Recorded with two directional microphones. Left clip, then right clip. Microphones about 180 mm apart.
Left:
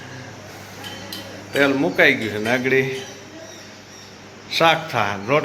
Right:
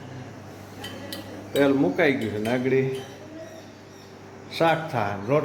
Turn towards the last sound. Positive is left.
turn(degrees=-5)  # may be behind; listen again after turning